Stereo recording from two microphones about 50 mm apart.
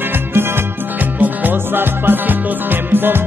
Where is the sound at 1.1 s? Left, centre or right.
Right.